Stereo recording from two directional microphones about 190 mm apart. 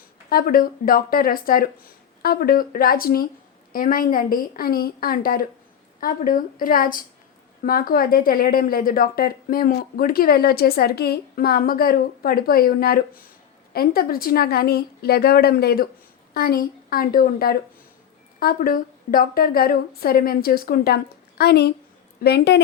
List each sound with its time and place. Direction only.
0.3 s a woman's voice: 50° left (ahead or behind)